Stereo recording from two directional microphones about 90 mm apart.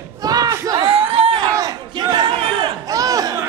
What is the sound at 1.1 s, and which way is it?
Crowd, 80° right.